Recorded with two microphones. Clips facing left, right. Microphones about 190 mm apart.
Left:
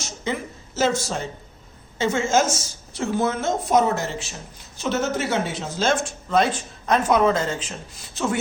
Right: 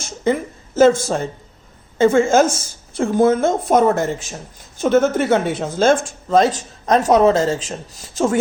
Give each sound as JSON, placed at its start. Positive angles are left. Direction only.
{"t": 0.0, "sound": "speech", "side_deg": -50}